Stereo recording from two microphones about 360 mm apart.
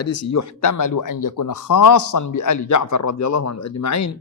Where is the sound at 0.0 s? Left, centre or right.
Left.